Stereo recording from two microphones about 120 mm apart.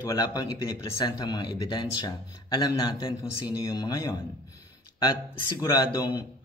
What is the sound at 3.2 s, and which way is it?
Speech, 30° left (ahead or behind).